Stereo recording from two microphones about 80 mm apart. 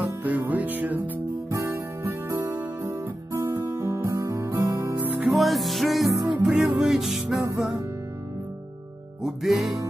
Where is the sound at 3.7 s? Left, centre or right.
Right.